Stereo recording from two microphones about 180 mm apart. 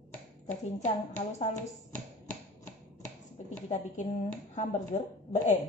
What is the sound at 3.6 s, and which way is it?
A woman's voice, 40° left (ahead or behind).